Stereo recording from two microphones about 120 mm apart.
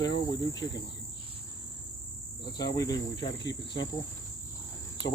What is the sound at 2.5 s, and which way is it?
Cricket, 35° left (ahead or behind).